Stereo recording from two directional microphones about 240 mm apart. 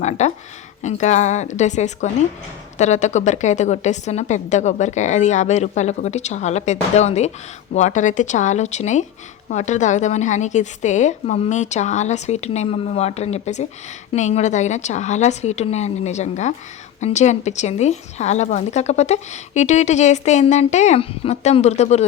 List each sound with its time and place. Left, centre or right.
0.0 s a woman's voice: left